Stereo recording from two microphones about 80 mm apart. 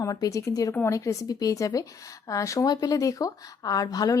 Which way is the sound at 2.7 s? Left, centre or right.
Left.